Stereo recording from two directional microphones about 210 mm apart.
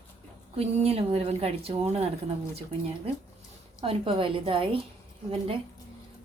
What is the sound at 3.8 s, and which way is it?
Speech, 25° right (ahead or behind).